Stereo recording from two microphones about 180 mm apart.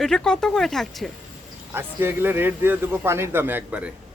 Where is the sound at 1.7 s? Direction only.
15° right (ahead or behind).